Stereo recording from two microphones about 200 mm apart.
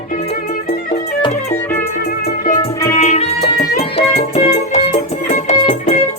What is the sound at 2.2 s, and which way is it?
Music, 45° left (ahead or behind).